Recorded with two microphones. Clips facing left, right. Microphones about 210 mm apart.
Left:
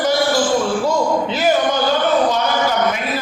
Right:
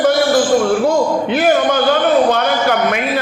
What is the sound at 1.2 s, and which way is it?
Speech, 60° right (ahead or behind).